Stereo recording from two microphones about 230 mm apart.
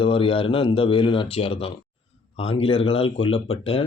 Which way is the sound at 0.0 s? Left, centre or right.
Left.